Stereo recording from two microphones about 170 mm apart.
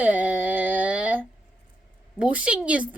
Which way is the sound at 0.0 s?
10° right (ahead or behind).